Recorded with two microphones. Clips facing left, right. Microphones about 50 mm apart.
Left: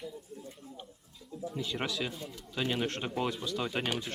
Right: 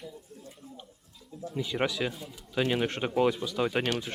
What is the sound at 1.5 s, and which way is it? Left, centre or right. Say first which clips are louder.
Speech: right 6 dB; centre.